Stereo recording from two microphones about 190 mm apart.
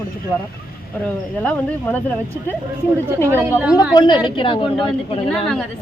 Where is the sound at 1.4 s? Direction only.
5° left (ahead or behind).